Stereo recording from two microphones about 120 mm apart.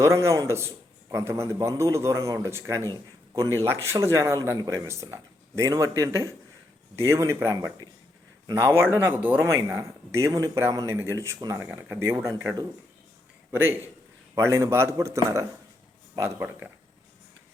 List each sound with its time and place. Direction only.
0.0 s speech: 25° right (ahead or behind)
13.5 s a man's voice: 20° right (ahead or behind)